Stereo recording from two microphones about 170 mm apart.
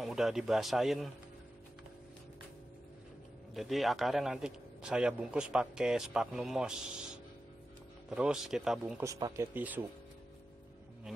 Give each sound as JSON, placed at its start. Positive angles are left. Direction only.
{"t": 0.0, "sound": "a man's voice", "side_deg": 0}
{"t": 3.5, "sound": "a man's voice", "side_deg": 0}
{"t": 8.1, "sound": "a man's voice", "side_deg": -5}
{"t": 9.0, "sound": "speech", "side_deg": -20}